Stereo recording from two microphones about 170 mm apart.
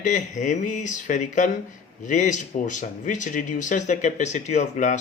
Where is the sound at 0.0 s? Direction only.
45° left (ahead or behind).